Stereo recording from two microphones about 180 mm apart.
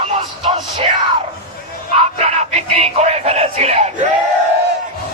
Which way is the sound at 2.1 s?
40° right (ahead or behind).